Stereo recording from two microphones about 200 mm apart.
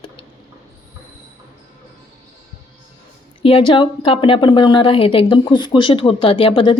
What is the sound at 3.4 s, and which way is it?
A woman's voice, 25° left (ahead or behind).